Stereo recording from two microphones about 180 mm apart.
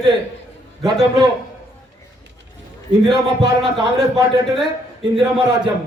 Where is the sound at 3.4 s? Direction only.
20° right (ahead or behind).